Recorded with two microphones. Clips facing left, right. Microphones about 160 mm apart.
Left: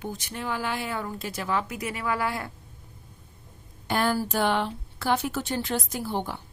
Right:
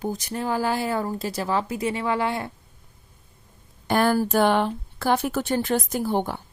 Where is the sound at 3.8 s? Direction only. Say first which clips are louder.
Right 5 dB; 50° right (ahead or behind).